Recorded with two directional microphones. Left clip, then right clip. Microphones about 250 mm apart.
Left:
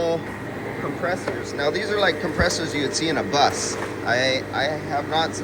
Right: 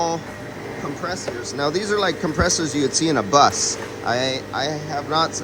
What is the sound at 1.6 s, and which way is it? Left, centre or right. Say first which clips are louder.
Speech: right 1 dB; right.